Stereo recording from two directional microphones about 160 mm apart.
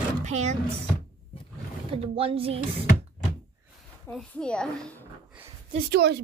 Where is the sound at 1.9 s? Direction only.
35° right (ahead or behind).